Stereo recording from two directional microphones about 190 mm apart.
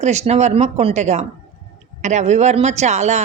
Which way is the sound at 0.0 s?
35° right (ahead or behind).